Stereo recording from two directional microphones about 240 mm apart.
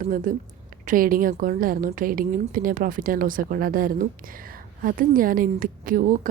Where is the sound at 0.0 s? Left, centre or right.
Right.